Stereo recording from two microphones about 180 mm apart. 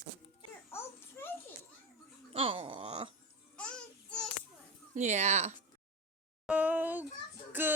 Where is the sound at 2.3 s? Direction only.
30° right (ahead or behind).